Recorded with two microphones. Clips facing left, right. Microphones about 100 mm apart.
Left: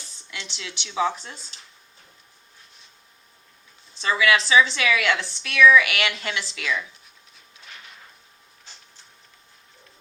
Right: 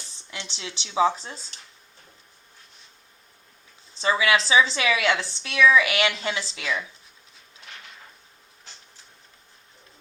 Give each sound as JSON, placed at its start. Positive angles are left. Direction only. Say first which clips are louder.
{"t": 0.3, "sound": "a woman's voice", "louder": "even", "side_deg": -30}
{"t": 3.9, "sound": "a woman's voice", "louder": "left 1 dB", "side_deg": -25}